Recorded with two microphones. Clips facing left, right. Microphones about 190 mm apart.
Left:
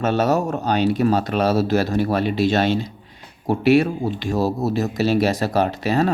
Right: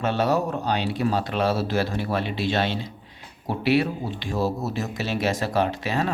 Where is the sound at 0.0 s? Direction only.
45° left (ahead or behind).